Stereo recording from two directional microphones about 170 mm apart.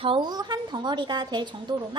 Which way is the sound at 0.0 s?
30° right (ahead or behind).